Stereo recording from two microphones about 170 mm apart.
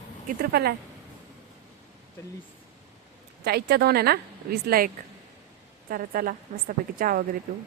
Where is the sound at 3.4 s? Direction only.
70° right (ahead or behind).